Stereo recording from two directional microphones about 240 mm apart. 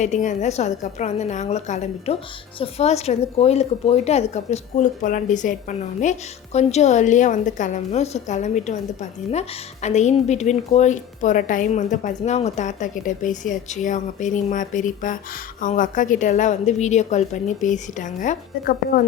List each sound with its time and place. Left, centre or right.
0.0 s a woman's voice: left